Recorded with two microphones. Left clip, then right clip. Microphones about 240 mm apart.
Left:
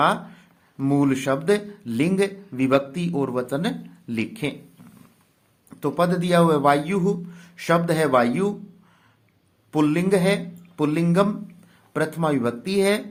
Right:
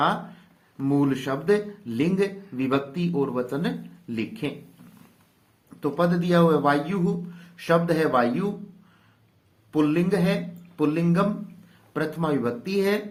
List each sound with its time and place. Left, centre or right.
0.0 s speech: left
5.8 s speech: left
9.7 s speech: left